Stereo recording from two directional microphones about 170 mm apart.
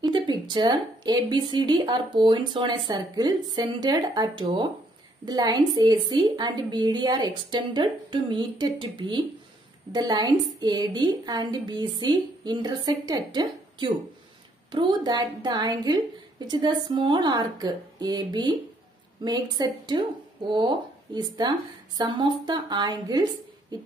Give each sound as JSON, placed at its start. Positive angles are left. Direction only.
{"t": 0.0, "sound": "speech", "side_deg": -25}